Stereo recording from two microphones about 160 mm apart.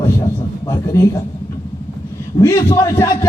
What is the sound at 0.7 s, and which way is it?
Speech, 15° left (ahead or behind).